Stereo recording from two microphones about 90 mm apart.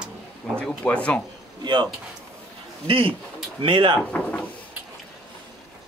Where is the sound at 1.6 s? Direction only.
60° right (ahead or behind).